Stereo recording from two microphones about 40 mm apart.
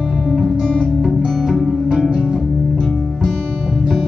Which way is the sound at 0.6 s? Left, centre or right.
Centre.